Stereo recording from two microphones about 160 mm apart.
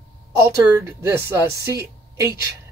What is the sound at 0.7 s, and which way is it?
Speech, 15° right (ahead or behind).